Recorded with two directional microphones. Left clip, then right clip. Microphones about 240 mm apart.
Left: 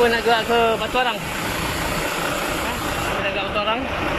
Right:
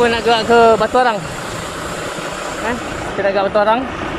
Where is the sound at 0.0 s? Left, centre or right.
Centre.